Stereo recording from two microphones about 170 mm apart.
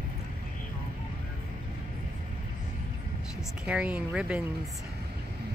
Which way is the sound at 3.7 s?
5° right (ahead or behind).